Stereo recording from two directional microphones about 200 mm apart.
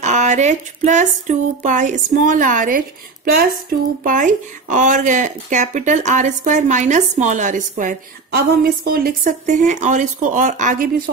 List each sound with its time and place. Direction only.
0.0 s speech: 35° right (ahead or behind)
4.0 s speech: 40° right (ahead or behind)